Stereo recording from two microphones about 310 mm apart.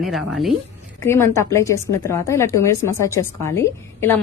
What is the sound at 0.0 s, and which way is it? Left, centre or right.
A woman's voice, centre.